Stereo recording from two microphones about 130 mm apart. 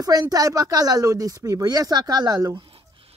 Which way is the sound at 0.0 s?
30° right (ahead or behind).